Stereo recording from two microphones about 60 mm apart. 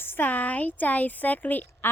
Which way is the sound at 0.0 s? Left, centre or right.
Left.